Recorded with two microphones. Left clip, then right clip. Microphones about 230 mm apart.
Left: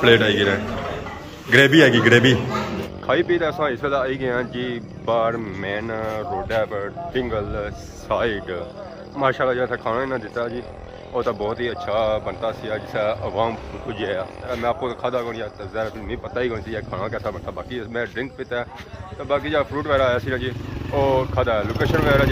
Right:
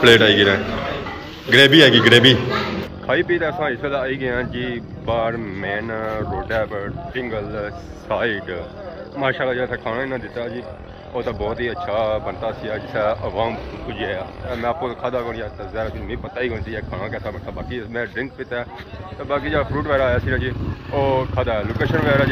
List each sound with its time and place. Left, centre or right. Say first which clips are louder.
0.0 s speech: right 4 dB; centre